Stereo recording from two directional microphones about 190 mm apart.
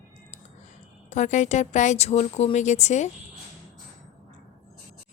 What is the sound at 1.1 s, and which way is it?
A woman's voice, 40° left (ahead or behind).